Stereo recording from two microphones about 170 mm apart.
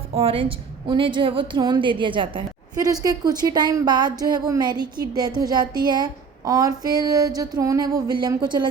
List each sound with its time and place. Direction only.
0.1 s a woman's voice: 35° right (ahead or behind)